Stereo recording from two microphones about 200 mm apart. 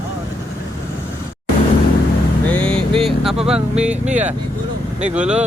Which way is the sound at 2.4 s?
5° left (ahead or behind).